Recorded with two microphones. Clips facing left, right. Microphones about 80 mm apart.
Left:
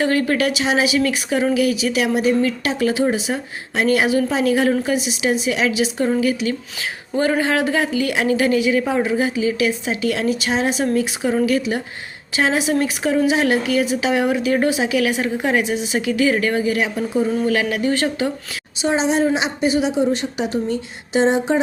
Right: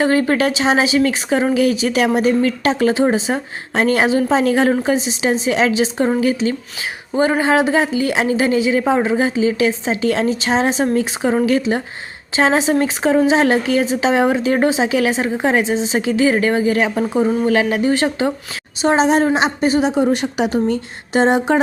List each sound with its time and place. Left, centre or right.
0.0 s a woman's voice: right
16.7 s a woman's voice: right
17.4 s a woman's voice: right
18.8 s a woman's voice: right
20.1 s a woman's voice: right
20.7 s a sound: right